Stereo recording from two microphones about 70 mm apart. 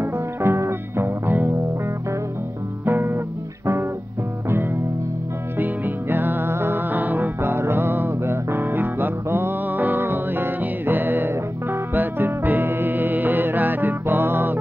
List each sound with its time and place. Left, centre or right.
0.0 s music: right
2.8 s music: right
4.5 s music: right